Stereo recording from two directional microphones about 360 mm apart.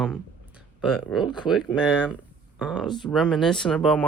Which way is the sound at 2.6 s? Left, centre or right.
Centre.